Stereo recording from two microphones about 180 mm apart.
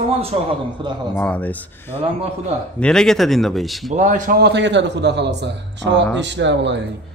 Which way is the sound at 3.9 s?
45° right (ahead or behind).